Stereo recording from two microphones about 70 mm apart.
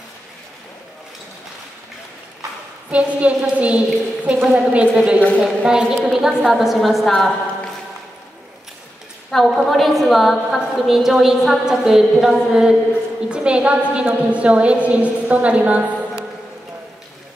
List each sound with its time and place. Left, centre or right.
2.9 s a woman's voice: centre
9.3 s a woman's voice: centre